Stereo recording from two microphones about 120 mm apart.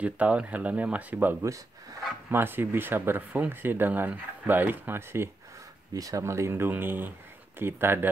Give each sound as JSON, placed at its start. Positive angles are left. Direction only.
{"t": 0.0, "sound": "speech", "side_deg": -10}
{"t": 2.3, "sound": "speech", "side_deg": -20}